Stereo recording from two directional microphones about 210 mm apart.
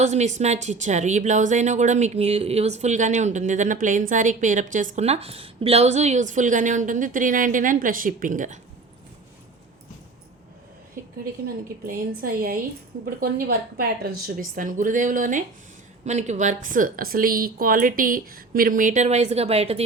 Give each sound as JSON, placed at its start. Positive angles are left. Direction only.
{"t": 0.0, "sound": "speech", "side_deg": -35}
{"t": 11.4, "sound": "a woman's voice", "side_deg": -45}
{"t": 14.2, "sound": "speech", "side_deg": -40}